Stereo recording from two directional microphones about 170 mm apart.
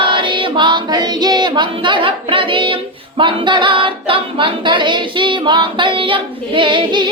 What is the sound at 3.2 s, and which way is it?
Singing, 30° right (ahead or behind).